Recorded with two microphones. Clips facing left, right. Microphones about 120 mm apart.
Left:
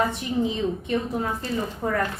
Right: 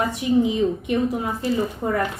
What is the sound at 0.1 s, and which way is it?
A woman's voice, 15° right (ahead or behind).